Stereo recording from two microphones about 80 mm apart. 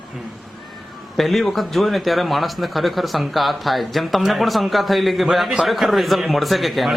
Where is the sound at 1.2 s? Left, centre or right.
Centre.